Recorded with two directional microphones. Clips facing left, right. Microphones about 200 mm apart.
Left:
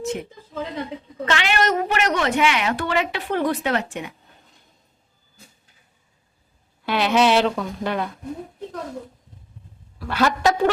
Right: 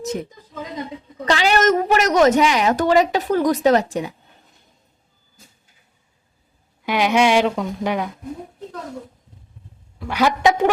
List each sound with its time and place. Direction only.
0.0 s a woman's voice: 40° right (ahead or behind)
1.3 s a woman's voice: 40° right (ahead or behind)
6.8 s a woman's voice: 15° right (ahead or behind)
10.0 s a woman's voice: 15° right (ahead or behind)